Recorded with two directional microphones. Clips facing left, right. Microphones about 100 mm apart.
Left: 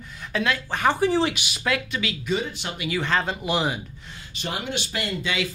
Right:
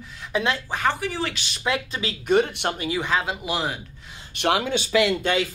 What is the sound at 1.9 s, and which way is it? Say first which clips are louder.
Speech: left 1 dB; 35° right (ahead or behind).